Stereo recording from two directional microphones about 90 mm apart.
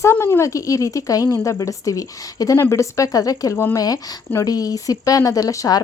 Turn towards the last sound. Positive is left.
turn(degrees=40)  # may be behind; listen again after turning